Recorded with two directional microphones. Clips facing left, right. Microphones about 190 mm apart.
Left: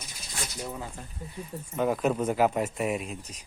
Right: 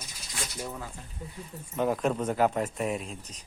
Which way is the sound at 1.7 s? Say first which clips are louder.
Left 1 dB; centre (ahead or behind).